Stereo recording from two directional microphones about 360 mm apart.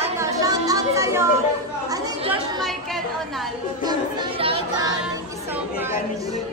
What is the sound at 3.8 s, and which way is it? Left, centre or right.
Chatter, centre.